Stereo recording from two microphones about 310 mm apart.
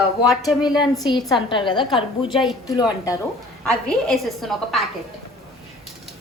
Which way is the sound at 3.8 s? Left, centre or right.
Centre.